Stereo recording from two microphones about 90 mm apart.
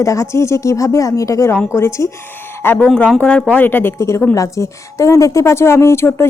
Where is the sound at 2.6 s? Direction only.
20° left (ahead or behind).